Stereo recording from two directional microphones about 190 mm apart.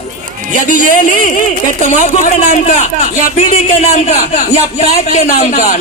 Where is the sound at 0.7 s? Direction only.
45° left (ahead or behind).